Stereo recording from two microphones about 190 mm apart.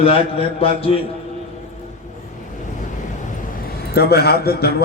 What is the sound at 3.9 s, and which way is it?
Speech, 55° left (ahead or behind).